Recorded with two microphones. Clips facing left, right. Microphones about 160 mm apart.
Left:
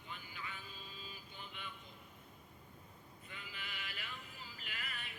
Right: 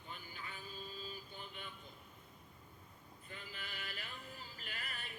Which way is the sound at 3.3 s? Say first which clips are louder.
Right 1 dB; 40° right (ahead or behind).